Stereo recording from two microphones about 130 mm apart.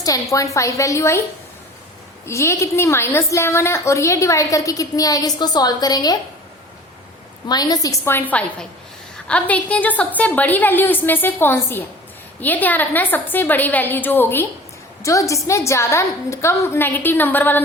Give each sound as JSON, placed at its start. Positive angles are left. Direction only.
{"t": 0.0, "sound": "a woman's voice", "side_deg": 25}
{"t": 2.2, "sound": "a woman's voice", "side_deg": 20}
{"t": 7.4, "sound": "a woman's voice", "side_deg": 30}